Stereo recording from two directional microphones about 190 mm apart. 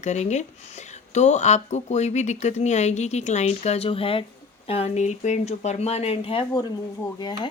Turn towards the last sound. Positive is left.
turn(degrees=20)  # may be behind; listen again after turning